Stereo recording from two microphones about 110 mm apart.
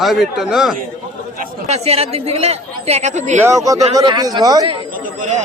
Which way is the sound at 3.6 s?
35° right (ahead or behind).